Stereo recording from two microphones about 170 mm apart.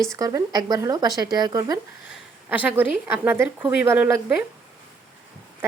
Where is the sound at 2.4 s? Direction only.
10° right (ahead or behind).